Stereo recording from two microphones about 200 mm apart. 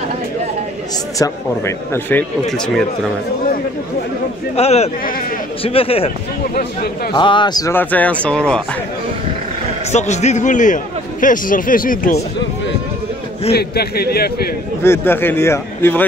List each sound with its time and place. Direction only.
1.1 s speech: 15° left (ahead or behind)
4.6 s a man's voice: 30° left (ahead or behind)
7.2 s speech: 25° left (ahead or behind); by 8.6 s 5° left (ahead or behind)
9.8 s a man's voice: 35° left (ahead or behind)
13.5 s a man's voice: 50° left (ahead or behind)
14.8 s speech: 10° left (ahead or behind)